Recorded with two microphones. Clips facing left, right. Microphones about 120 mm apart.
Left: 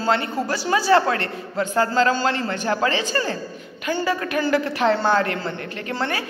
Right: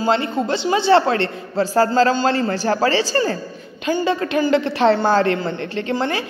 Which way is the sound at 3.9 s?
25° right (ahead or behind).